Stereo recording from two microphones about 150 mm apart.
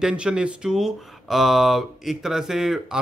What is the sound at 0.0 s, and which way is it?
Speech, 5° right (ahead or behind).